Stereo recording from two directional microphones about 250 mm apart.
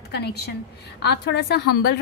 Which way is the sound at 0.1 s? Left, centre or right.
Left.